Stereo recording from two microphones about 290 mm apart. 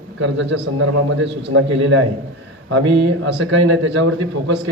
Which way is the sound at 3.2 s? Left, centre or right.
Right.